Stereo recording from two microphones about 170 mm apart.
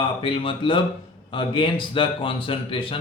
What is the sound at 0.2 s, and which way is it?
Speech, 30° left (ahead or behind).